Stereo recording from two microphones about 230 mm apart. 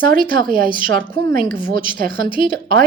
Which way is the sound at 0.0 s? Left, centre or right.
Right.